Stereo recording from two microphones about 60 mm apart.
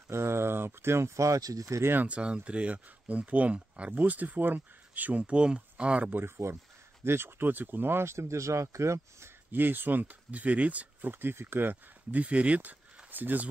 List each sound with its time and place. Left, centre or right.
0.1 s speech: right
1.8 s speech: right
2.0 s speech: centre
6.1 s speech: right
9.5 s speech: right